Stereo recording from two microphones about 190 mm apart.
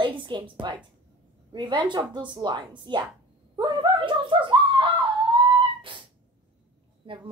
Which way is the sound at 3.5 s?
25° right (ahead or behind).